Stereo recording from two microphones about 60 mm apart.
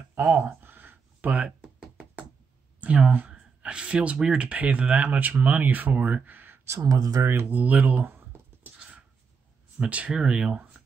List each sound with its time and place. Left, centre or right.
0.3 s a sound: right
2.8 s speech: right
6.9 s speech: right
7.4 s speech: right
8.6 s dog: right
9.8 s speech: right